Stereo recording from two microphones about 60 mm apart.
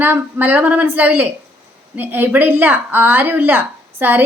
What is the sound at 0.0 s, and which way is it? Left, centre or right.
A woman's voice, right.